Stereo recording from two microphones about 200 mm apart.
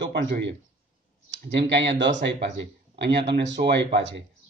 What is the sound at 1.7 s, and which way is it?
Speech, 60° right (ahead or behind).